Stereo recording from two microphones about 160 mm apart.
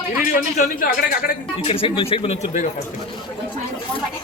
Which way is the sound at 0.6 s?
60° left (ahead or behind).